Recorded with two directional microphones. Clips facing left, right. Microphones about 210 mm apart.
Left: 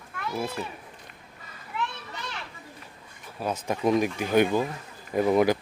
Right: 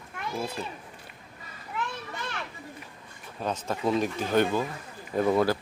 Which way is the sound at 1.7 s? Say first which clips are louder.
Left 2 dB; 40° right (ahead or behind).